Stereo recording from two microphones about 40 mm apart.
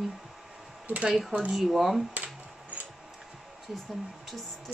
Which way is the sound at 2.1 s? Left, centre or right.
Right.